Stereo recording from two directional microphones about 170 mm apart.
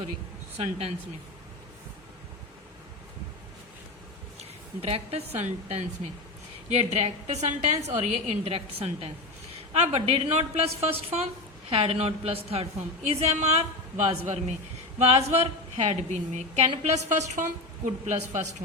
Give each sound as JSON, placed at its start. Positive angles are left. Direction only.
{"t": 0.5, "sound": "a woman's voice", "side_deg": -35}
{"t": 4.8, "sound": "a woman's voice", "side_deg": -35}